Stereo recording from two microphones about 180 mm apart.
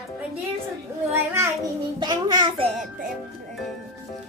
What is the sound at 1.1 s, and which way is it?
Child singing, 15° right (ahead or behind).